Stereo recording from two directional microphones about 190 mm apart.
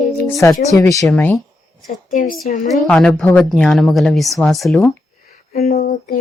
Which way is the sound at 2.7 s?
5° left (ahead or behind).